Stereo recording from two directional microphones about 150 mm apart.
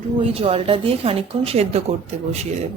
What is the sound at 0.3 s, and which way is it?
A woman's voice, 40° right (ahead or behind).